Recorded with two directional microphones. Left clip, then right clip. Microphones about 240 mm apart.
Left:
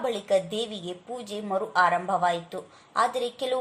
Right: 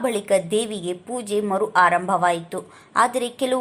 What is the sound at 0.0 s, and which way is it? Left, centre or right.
A woman's voice, centre.